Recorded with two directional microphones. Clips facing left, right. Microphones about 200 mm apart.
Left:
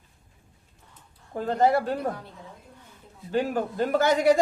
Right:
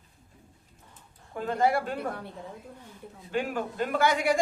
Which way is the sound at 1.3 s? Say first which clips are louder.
Left 3 dB; 35° left (ahead or behind).